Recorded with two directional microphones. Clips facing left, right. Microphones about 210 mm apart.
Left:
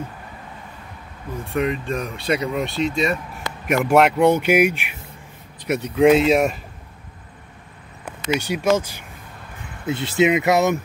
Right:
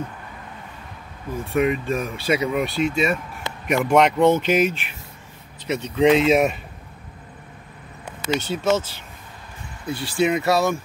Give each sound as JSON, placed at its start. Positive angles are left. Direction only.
{"t": 1.6, "sound": "speech", "side_deg": -5}
{"t": 8.3, "sound": "speech", "side_deg": 10}